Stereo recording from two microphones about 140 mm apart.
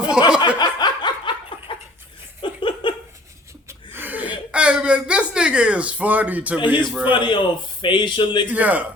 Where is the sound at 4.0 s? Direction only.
10° right (ahead or behind).